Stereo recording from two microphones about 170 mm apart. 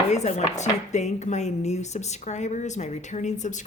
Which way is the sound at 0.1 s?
40° left (ahead or behind).